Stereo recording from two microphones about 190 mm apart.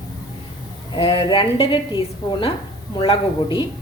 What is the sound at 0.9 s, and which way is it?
Speech, 30° left (ahead or behind).